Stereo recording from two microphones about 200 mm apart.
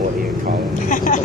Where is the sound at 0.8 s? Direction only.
40° left (ahead or behind).